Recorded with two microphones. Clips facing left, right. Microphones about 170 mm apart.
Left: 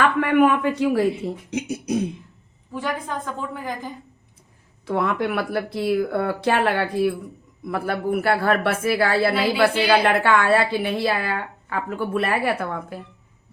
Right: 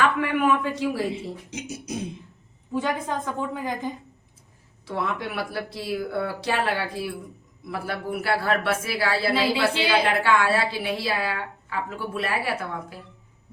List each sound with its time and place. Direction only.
0.2 s a sound: 60° left (ahead or behind)
1.5 s speech: 60° left (ahead or behind)
2.7 s a woman's voice: 20° right (ahead or behind)
4.9 s a woman's voice: 55° left (ahead or behind)